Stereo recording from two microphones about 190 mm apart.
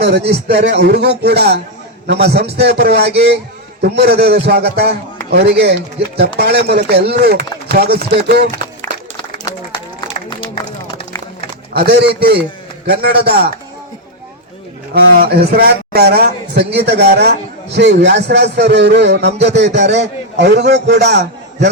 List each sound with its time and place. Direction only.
0.0 s a man's voice: 60° right (ahead or behind)
8.8 s applause: 20° left (ahead or behind)
11.7 s a man's voice: 55° right (ahead or behind)
14.9 s a man's voice: 55° right (ahead or behind)